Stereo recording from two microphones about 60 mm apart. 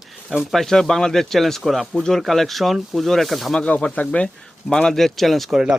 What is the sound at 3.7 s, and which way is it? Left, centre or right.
Speech, left.